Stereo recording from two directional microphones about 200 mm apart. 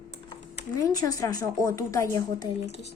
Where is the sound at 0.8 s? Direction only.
15° left (ahead or behind).